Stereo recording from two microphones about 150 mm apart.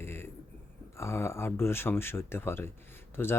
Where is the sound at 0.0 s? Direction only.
15° left (ahead or behind).